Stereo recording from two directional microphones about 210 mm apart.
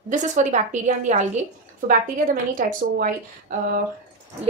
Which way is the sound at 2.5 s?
40° right (ahead or behind).